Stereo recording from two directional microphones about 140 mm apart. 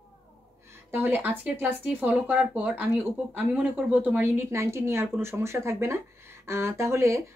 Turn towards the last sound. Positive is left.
turn(degrees=-20)  # may be behind; listen again after turning